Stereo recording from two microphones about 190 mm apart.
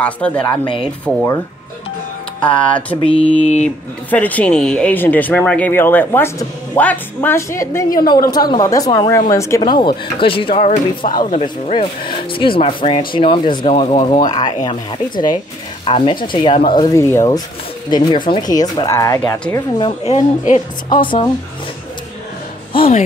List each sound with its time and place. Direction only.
0.0 s speech: 5° left (ahead or behind)
2.4 s a woman's voice: 25° left (ahead or behind)
3.6 s speech: 10° left (ahead or behind)
9.6 s speech: 25° left (ahead or behind)
20.1 s a woman's voice: 40° left (ahead or behind)
21.0 s speech: 25° left (ahead or behind)
22.7 s speech: 30° left (ahead or behind)